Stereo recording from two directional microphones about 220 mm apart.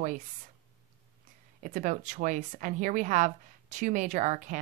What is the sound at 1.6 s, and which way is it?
Speech, 35° right (ahead or behind).